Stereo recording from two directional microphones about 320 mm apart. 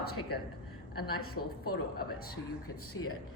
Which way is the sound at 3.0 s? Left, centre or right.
Left.